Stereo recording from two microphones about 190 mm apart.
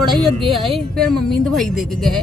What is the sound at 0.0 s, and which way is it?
A woman's voice, centre (ahead or behind).